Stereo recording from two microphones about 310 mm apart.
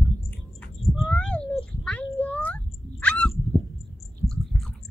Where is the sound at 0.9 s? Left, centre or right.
Centre.